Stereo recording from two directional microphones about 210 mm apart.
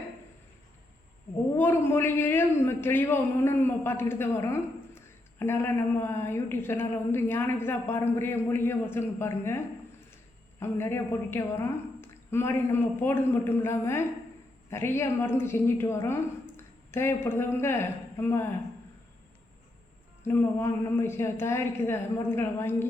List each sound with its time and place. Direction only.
1.5 s a man's voice: 10° left (ahead or behind)
20.2 s a man's voice: 10° left (ahead or behind)